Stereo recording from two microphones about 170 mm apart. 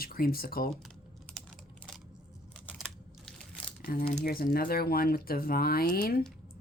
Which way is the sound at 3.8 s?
55° left (ahead or behind).